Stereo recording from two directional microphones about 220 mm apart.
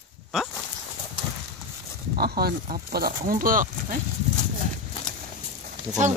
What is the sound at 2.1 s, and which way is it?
Speech, 45° right (ahead or behind).